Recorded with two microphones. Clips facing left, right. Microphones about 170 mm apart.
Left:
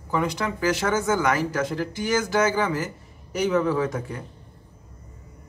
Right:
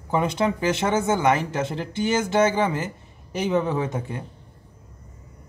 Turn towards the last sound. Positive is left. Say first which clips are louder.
# left 1 dB
turn(degrees=-25)  # may be behind; listen again after turning